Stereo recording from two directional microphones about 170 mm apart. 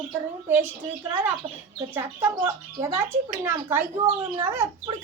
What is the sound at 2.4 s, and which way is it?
Speech, 15° right (ahead or behind).